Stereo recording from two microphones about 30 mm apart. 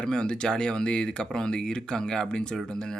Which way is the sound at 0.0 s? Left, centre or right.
Left.